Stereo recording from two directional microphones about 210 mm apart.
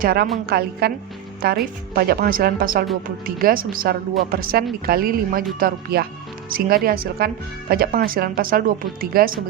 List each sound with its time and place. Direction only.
0.0 s speech: 45° right (ahead or behind)